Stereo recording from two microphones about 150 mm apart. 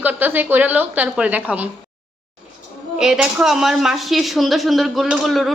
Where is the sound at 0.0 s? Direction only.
10° right (ahead or behind).